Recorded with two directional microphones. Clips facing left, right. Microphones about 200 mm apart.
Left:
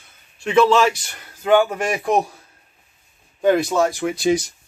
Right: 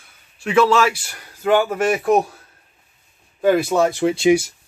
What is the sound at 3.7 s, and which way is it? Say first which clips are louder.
Speech: right 2 dB; 20° right (ahead or behind).